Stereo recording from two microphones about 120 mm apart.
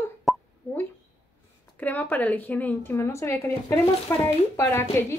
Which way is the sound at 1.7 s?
15° left (ahead or behind).